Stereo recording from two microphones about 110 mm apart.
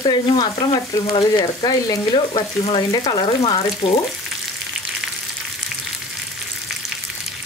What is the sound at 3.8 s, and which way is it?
Frying, 55° left (ahead or behind).